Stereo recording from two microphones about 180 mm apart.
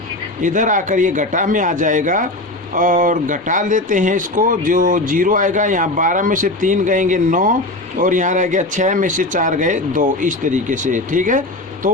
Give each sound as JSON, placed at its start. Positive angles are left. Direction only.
{"t": 0.4, "sound": "speech", "side_deg": -45}